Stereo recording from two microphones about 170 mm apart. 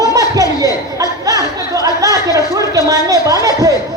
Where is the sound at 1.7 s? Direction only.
20° right (ahead or behind).